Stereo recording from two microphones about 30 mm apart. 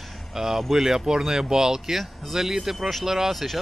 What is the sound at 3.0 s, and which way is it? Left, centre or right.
Speech, centre.